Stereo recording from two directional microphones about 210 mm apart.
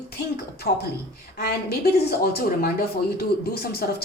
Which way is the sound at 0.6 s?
50° left (ahead or behind).